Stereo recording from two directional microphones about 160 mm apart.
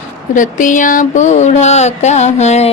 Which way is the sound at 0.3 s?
55° left (ahead or behind).